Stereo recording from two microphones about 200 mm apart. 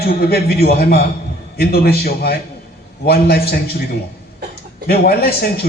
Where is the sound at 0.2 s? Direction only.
50° left (ahead or behind).